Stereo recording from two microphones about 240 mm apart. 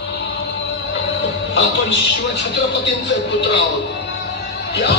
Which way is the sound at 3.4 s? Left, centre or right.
Left.